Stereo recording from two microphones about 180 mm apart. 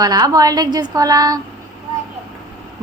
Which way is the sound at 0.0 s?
20° right (ahead or behind).